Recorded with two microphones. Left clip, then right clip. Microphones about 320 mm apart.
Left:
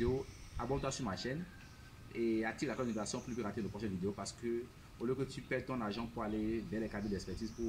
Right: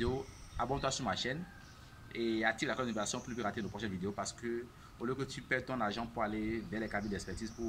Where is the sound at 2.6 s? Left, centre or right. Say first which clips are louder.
Right 3 dB; centre.